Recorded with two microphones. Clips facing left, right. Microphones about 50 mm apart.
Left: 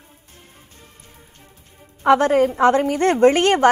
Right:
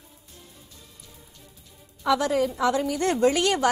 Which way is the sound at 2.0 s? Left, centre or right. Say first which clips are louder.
Left 8 dB; left.